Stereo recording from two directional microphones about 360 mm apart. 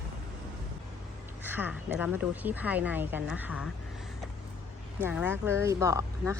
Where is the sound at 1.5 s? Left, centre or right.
Centre.